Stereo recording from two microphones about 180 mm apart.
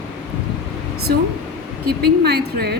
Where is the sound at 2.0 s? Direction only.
65° right (ahead or behind).